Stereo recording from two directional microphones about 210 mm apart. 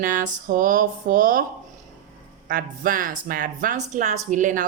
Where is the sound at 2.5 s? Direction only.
40° right (ahead or behind).